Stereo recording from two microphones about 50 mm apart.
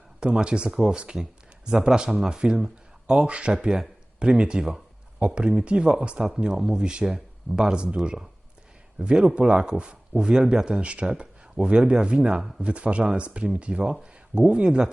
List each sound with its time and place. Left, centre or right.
0.2 s speech: centre
12.4 s speech: centre
12.6 s speech: right